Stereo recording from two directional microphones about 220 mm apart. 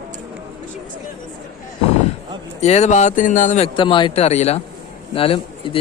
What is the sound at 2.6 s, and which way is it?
A man's voice, 30° left (ahead or behind).